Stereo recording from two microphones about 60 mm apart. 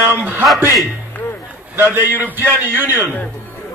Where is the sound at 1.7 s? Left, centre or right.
Right.